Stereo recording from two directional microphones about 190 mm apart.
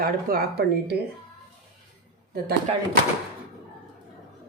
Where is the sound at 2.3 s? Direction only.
55° right (ahead or behind).